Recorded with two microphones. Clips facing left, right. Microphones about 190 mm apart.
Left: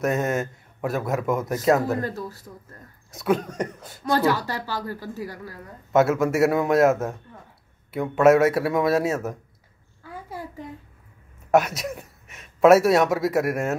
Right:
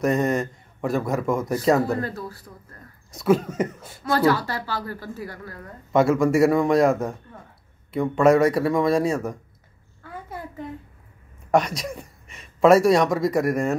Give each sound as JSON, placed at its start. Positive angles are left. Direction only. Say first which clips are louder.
{"t": 0.0, "sound": "a man's voice", "louder": "right 2 dB", "side_deg": 0}
{"t": 2.0, "sound": "a woman's voice", "louder": "even", "side_deg": 15}
{"t": 3.1, "sound": "a man's voice", "louder": "right 3 dB", "side_deg": 0}
{"t": 4.3, "sound": "a woman's voice", "louder": "right 2 dB", "side_deg": 15}
{"t": 11.5, "sound": "speech", "louder": "left 1 dB", "side_deg": 5}